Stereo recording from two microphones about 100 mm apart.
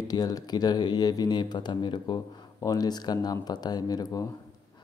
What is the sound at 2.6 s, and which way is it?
Speech, 40° left (ahead or behind).